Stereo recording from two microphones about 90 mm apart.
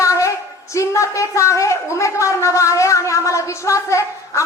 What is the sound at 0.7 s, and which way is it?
A woman's voice, 35° left (ahead or behind).